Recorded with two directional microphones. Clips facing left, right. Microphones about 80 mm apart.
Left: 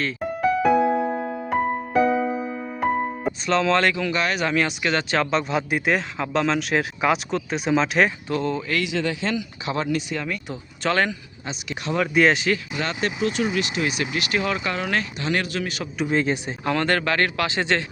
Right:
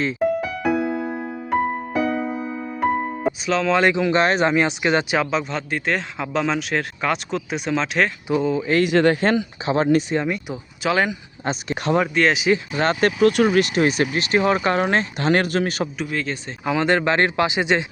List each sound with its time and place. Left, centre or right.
0.2 s music: centre
3.8 s speech: centre
4.1 s speech: right
4.5 s speech: centre
5.2 s speech: centre
8.3 s speech: centre
8.8 s speech: right
10.5 s speech: centre
11.4 s speech: right
12.1 s speech: centre
12.7 s speech: right
15.2 s speech: right
16.0 s speech: centre
16.6 s speech: centre